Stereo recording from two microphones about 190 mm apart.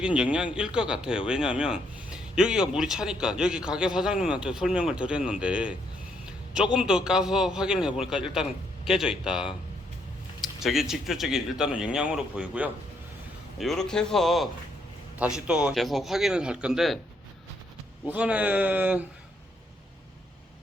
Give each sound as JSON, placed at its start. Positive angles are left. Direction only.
{"t": 0.0, "sound": "speech", "side_deg": -5}
{"t": 18.1, "sound": "speech", "side_deg": -5}